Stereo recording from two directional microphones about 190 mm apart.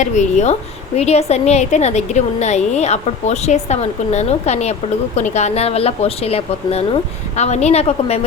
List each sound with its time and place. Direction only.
0.0 s a woman's voice: 40° left (ahead or behind)